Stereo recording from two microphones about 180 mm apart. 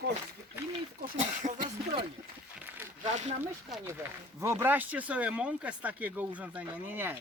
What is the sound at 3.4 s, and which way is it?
Speech, 10° right (ahead or behind).